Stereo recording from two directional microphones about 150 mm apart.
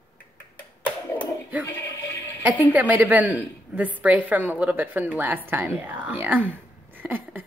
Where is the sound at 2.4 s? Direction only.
10° right (ahead or behind).